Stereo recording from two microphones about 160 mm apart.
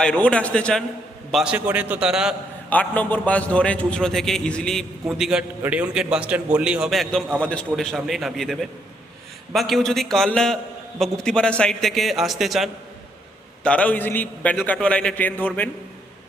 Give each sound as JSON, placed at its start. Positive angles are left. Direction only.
{"t": 0.0, "sound": "a man's voice", "side_deg": 5}
{"t": 2.6, "sound": "a man's voice", "side_deg": 10}
{"t": 13.7, "sound": "a man's voice", "side_deg": 10}